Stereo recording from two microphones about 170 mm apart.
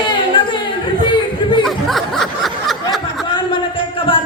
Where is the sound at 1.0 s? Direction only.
30° left (ahead or behind).